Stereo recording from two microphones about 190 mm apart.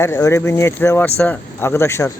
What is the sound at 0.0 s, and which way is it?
Speech, 15° left (ahead or behind).